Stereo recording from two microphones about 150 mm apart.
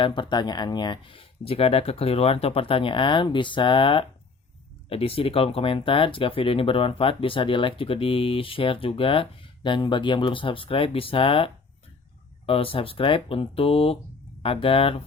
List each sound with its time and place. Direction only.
0.0 s speech: 35° left (ahead or behind)